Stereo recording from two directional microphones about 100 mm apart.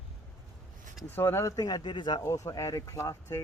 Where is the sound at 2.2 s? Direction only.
30° left (ahead or behind).